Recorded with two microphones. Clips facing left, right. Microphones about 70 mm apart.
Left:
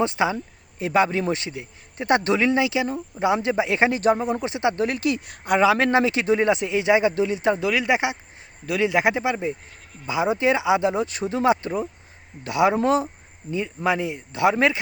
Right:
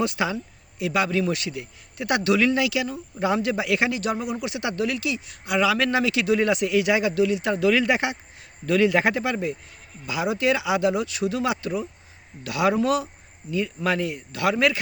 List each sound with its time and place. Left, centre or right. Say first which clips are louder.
0.0 s speech: left 3 dB; left
5.6 s speech: left 4 dB; left
7.7 s a man's voice: right 1 dB; centre